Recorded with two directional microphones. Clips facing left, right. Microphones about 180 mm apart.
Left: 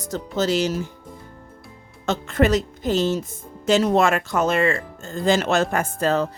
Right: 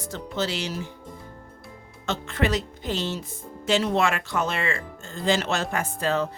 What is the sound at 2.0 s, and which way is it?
A woman's voice, 45° left (ahead or behind).